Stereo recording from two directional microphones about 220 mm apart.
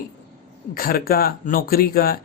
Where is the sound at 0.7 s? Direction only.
40° left (ahead or behind).